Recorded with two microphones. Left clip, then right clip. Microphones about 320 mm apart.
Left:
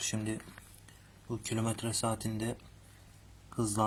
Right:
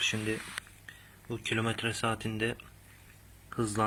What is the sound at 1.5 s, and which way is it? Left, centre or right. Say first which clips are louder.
Speech: right 4 dB; left.